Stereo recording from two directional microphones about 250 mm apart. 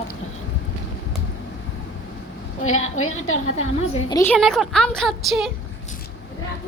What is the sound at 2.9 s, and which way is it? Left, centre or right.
Speech, left.